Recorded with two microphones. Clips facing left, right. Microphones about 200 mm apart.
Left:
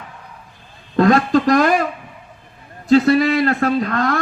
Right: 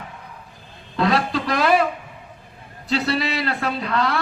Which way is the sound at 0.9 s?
45° left (ahead or behind).